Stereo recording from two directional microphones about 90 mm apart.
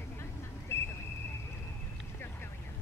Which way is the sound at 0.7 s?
30° left (ahead or behind).